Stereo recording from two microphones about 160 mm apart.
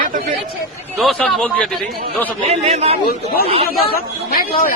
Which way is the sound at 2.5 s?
40° right (ahead or behind).